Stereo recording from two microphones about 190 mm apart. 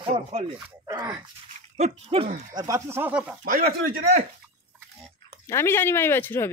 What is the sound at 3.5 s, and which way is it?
Speech, 50° right (ahead or behind).